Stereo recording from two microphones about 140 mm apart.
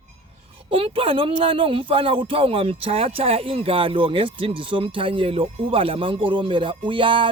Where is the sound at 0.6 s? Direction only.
40° right (ahead or behind).